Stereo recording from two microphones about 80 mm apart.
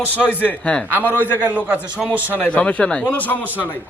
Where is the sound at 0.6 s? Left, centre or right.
Centre.